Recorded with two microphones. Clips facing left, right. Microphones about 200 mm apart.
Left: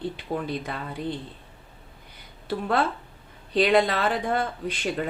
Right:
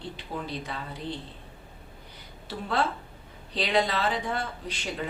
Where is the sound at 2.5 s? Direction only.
55° left (ahead or behind).